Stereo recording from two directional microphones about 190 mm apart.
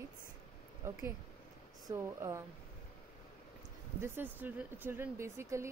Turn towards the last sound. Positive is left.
turn(degrees=-15)  # may be behind; listen again after turning